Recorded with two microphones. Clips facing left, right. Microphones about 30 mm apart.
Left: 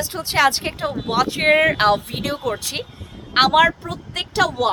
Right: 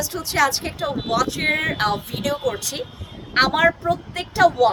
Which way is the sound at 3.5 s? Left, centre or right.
Left.